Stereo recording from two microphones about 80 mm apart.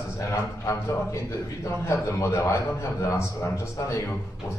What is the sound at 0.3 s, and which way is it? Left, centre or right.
A man's voice, left.